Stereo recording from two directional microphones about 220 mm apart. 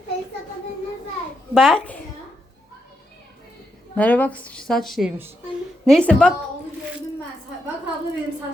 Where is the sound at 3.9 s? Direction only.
5° left (ahead or behind).